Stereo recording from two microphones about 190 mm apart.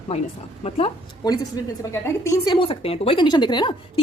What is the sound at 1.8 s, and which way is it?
A woman's voice, 15° left (ahead or behind).